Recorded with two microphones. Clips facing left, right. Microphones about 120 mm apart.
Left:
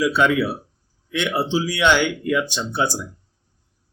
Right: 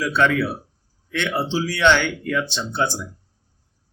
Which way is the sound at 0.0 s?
10° left (ahead or behind).